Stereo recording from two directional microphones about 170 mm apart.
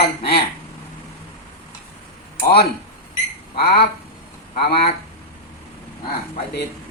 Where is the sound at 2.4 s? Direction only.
65° left (ahead or behind).